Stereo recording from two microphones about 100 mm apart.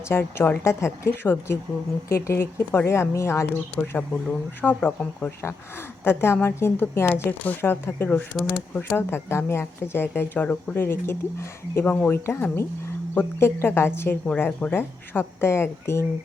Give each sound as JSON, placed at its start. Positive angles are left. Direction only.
{"t": 0.1, "sound": "speech", "side_deg": 25}
{"t": 3.8, "sound": "speech", "side_deg": 15}